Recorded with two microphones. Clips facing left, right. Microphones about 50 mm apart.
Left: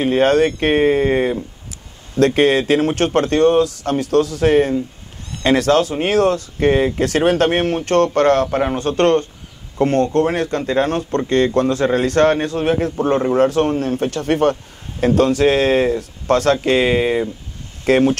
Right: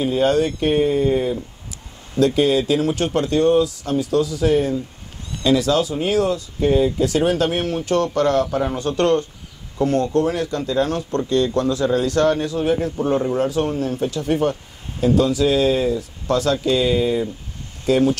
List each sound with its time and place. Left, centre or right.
0.0 s speech: left